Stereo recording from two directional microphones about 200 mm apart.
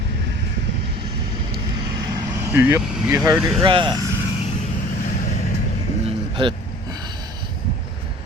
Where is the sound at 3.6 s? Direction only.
25° right (ahead or behind).